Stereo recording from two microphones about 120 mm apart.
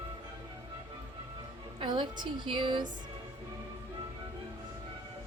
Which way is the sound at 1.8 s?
40° right (ahead or behind).